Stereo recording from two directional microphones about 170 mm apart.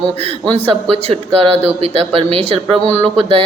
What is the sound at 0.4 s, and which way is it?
Speech, 35° right (ahead or behind).